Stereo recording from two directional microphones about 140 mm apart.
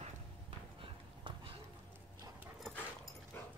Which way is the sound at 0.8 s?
40° right (ahead or behind).